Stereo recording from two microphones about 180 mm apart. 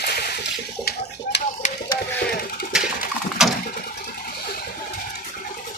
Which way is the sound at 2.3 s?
55° left (ahead or behind).